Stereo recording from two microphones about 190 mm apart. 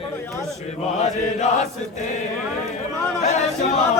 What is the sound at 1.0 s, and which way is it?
Chant, 40° left (ahead or behind).